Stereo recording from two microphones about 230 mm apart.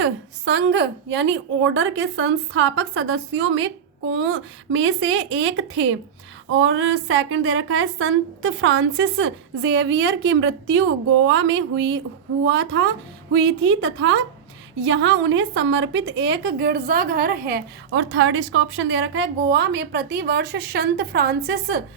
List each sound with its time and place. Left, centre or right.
0.0 s a woman's voice: right
17.9 s a woman's voice: right